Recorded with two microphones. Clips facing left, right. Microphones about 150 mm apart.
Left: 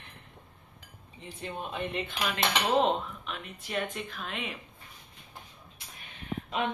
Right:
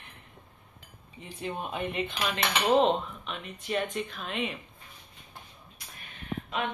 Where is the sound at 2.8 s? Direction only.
Centre (ahead or behind).